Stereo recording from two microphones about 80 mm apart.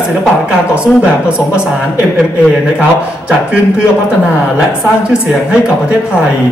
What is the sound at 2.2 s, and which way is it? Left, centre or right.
A man's voice, centre.